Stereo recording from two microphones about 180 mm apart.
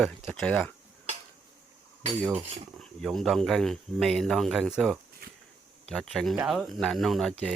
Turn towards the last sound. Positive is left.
turn(degrees=0)  # may be behind; listen again after turning